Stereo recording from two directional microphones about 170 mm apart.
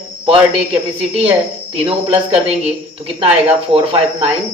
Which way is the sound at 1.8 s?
35° right (ahead or behind).